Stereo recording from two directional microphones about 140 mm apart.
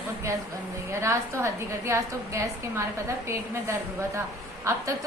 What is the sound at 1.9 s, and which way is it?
A woman's voice, 20° right (ahead or behind).